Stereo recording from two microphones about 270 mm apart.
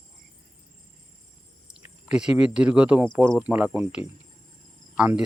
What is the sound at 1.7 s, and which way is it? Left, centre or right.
Speech, centre.